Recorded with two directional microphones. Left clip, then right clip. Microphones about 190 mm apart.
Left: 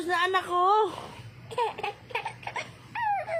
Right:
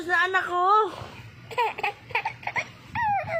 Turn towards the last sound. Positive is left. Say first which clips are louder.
# right 3 dB
turn(degrees=20)  # may be behind; listen again after turning